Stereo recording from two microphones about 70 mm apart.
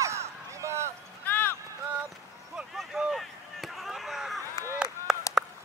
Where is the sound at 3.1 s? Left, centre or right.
Centre.